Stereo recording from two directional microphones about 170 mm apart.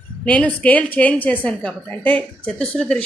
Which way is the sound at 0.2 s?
10° left (ahead or behind).